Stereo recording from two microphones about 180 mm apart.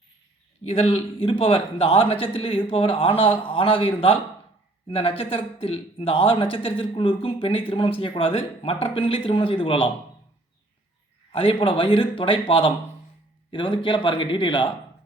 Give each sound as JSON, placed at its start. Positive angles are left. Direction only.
{"t": 0.6, "sound": "a man's voice", "side_deg": 35}
{"t": 11.3, "sound": "a man's voice", "side_deg": 30}